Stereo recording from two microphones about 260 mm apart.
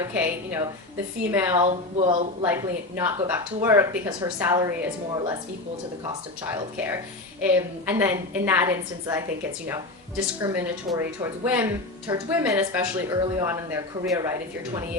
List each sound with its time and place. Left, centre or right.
0.0 s a woman's voice: centre
1.5 s speech: right
2.4 s a woman's voice: centre
6.7 s a woman's voice: centre